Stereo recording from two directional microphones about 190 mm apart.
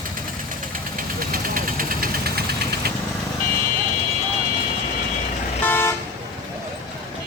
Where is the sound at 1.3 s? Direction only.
45° right (ahead or behind).